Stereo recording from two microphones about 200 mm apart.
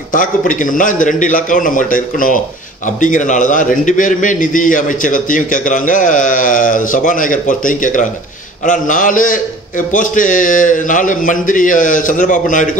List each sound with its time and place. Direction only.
0.1 s a man's voice: 40° left (ahead or behind)